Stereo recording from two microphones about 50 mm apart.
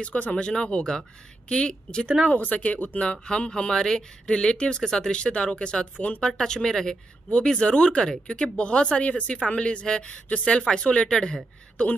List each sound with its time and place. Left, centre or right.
0.0 s a woman's voice: left
2.3 s speech: left
3.0 s a woman's voice: centre